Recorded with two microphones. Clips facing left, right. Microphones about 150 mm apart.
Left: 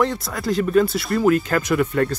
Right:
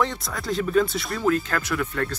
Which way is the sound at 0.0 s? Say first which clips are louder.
Left 5 dB; centre (ahead or behind).